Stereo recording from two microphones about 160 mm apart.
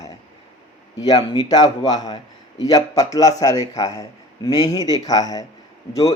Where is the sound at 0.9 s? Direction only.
25° left (ahead or behind).